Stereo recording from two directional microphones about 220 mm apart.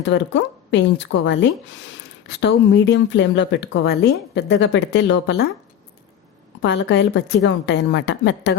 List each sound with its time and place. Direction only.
0.0 s a woman's voice: 55° left (ahead or behind)
6.6 s speech: 55° left (ahead or behind)